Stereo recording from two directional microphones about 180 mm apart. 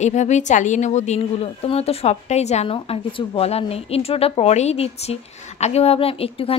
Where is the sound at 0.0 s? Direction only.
40° left (ahead or behind).